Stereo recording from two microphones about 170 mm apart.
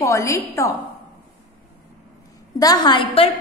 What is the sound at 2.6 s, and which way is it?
Speech, 25° left (ahead or behind).